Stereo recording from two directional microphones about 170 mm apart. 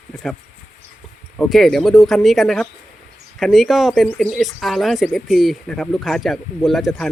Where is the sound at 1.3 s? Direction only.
Centre (ahead or behind).